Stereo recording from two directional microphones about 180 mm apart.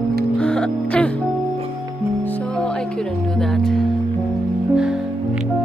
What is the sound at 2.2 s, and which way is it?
Music, 5° left (ahead or behind).